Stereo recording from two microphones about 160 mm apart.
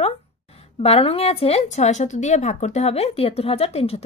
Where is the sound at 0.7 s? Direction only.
40° left (ahead or behind).